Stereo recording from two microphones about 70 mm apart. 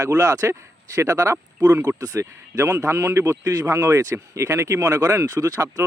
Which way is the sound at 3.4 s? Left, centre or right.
Right.